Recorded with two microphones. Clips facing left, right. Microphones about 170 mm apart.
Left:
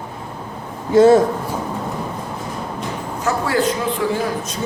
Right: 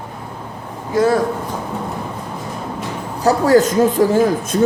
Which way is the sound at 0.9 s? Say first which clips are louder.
Left 5 dB; 25° left (ahead or behind).